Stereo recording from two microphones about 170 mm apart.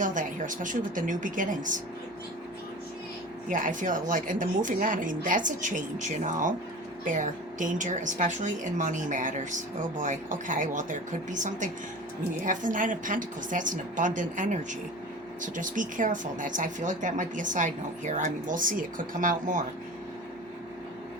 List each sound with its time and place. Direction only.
0.0 s speech: 50° right (ahead or behind)
3.5 s speech: 50° right (ahead or behind)